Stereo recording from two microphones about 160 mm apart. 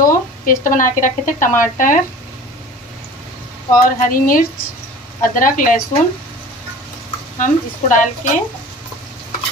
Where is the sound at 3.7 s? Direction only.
60° left (ahead or behind).